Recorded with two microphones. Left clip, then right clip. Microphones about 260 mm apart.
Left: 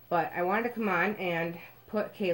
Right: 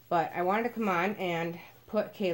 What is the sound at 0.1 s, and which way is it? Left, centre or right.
Speech, right.